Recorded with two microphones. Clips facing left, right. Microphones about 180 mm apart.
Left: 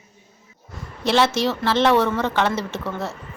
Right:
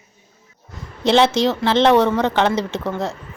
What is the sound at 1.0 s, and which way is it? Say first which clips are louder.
A woman's voice: right 4 dB; 20° right (ahead or behind).